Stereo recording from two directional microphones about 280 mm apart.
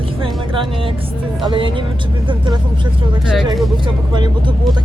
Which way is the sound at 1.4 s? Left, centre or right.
Centre.